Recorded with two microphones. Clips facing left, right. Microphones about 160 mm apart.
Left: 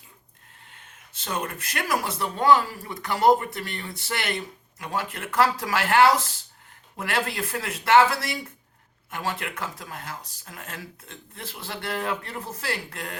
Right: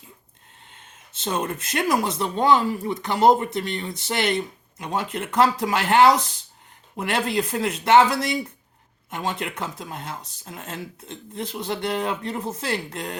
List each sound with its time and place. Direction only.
0.7 s speech: 20° right (ahead or behind)